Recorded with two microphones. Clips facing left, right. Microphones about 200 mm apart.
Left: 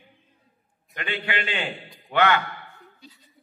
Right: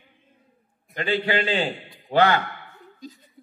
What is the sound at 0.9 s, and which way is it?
A man's voice, 30° right (ahead or behind).